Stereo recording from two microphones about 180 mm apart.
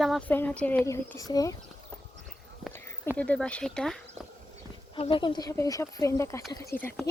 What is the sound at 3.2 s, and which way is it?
Speech, 5° left (ahead or behind).